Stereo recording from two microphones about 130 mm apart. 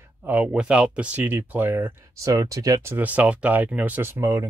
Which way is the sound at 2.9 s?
10° right (ahead or behind).